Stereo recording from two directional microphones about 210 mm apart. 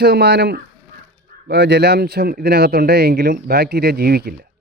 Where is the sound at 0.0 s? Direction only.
50° right (ahead or behind).